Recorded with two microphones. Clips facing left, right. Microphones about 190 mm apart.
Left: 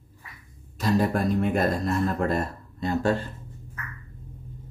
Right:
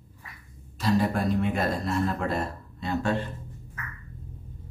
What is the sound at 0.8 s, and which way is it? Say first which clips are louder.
Speech: left 1 dB; 45° left (ahead or behind).